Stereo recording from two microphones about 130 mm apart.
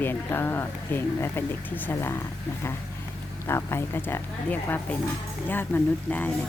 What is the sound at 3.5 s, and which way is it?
A woman's voice, 20° left (ahead or behind).